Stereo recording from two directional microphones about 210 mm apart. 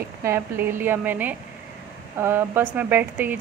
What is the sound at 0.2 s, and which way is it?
A woman's voice, 10° right (ahead or behind).